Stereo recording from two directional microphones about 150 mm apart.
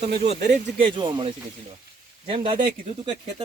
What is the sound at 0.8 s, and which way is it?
Speech, 30° right (ahead or behind).